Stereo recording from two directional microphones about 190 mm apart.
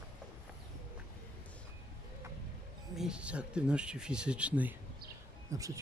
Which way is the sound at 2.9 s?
5° right (ahead or behind).